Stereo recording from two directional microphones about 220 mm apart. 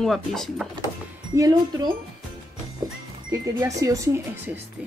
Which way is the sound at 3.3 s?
15° right (ahead or behind).